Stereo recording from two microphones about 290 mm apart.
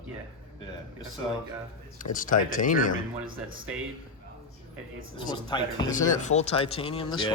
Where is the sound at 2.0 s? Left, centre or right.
Left.